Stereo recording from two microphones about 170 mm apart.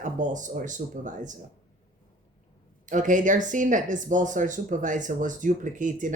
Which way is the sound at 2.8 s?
50° right (ahead or behind).